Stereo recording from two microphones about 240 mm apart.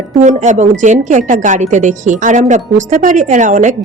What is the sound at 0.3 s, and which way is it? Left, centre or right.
Speech, right.